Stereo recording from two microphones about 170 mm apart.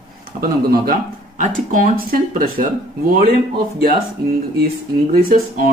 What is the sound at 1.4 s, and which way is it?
Speech, 50° right (ahead or behind).